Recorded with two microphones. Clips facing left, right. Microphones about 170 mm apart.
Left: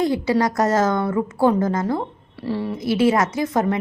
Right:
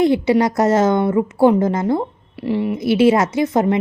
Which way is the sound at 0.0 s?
25° right (ahead or behind).